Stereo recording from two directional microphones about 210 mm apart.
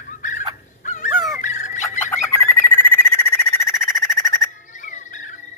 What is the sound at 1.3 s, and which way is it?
Fowl, 35° left (ahead or behind).